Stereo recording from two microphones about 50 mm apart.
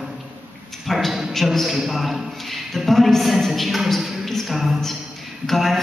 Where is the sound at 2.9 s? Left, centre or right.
Centre.